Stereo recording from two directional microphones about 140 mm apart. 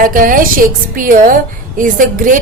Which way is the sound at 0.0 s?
75° right (ahead or behind).